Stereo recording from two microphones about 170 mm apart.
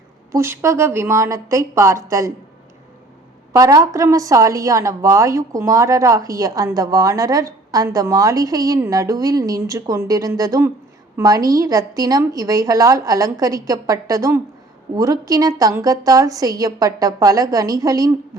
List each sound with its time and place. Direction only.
0.3 s a woman's voice: 15° right (ahead or behind)
3.5 s a woman's voice: 20° right (ahead or behind)